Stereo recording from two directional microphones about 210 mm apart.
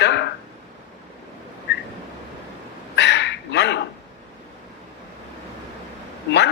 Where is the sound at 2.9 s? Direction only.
55° left (ahead or behind).